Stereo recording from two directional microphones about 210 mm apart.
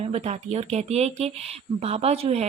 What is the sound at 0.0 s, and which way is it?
Speech, 30° right (ahead or behind).